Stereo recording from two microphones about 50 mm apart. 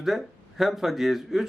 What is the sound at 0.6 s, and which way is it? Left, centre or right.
Speech, centre.